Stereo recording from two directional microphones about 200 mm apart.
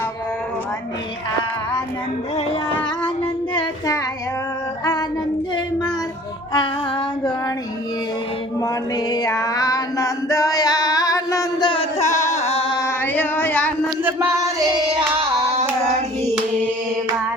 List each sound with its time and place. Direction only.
3.5 s child singing: 20° left (ahead or behind)
8.6 s music: 20° left (ahead or behind)
14.0 s male singing: 10° right (ahead or behind)
15.2 s carnatic music: 30° right (ahead or behind)